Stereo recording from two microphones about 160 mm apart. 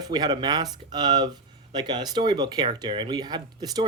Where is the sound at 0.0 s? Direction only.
25° right (ahead or behind).